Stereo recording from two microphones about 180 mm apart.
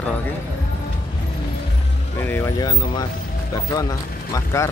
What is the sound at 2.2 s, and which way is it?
Speech, 10° left (ahead or behind).